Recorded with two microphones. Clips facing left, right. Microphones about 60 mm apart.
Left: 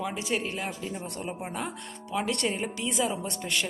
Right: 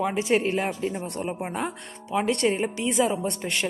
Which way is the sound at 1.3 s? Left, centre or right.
Centre.